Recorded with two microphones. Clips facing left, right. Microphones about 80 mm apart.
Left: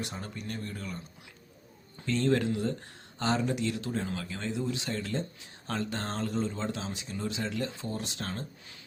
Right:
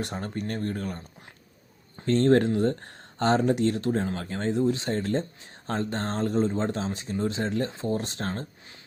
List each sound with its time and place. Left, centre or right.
0.0 s speech: right
2.0 s speech: right